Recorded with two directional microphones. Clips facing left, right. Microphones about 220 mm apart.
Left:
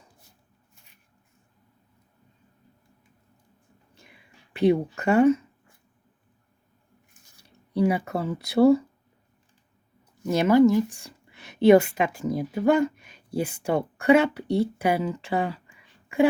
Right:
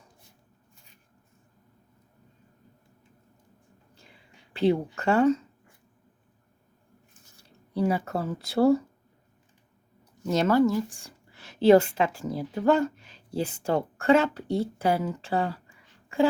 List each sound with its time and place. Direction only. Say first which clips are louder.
4.0 s a sound: left 1 dB; 15° left (ahead or behind)
7.3 s speech: even; 15° left (ahead or behind)
10.2 s a woman's voice: left 4 dB; 15° left (ahead or behind)